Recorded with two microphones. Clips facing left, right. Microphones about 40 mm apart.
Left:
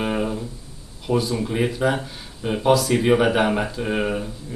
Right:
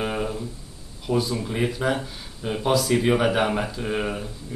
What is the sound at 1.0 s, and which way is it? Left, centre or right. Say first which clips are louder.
Speech: left 2 dB; centre.